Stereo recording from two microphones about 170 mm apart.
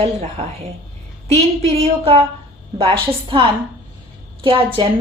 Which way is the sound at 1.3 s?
40° right (ahead or behind).